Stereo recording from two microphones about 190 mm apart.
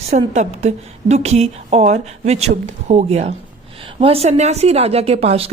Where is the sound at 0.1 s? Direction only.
35° right (ahead or behind).